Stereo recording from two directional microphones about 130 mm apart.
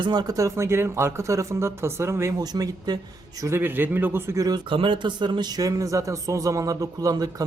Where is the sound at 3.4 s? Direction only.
15° right (ahead or behind).